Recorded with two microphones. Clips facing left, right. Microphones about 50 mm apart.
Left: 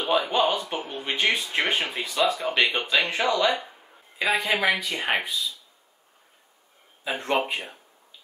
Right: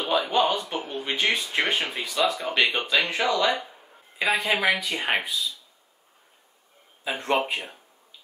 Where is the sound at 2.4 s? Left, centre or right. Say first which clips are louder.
Even; centre.